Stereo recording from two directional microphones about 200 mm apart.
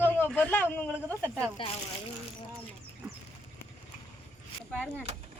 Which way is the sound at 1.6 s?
25° left (ahead or behind).